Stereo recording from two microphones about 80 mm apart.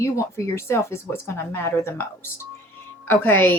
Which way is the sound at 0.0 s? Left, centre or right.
Left.